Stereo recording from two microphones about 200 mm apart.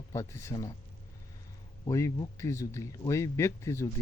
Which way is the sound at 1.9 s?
15° left (ahead or behind).